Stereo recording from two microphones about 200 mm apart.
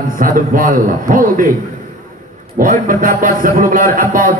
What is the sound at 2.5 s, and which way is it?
A man's voice, 45° right (ahead or behind).